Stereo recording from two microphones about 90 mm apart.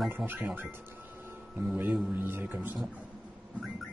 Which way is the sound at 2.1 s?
25° right (ahead or behind).